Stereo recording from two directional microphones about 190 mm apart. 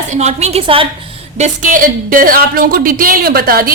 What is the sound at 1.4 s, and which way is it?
Speech, 45° right (ahead or behind).